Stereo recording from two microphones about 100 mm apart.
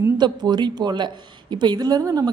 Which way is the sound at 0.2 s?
45° right (ahead or behind).